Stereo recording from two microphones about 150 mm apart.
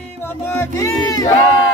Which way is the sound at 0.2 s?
15° left (ahead or behind).